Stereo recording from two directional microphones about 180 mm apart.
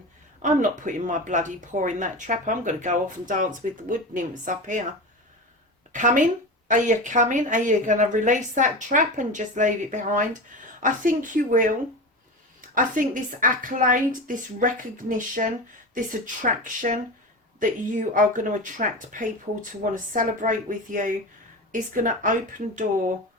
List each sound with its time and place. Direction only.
0.5 s speech: 45° right (ahead or behind)
5.9 s speech: 45° right (ahead or behind)
12.7 s speech: 50° right (ahead or behind)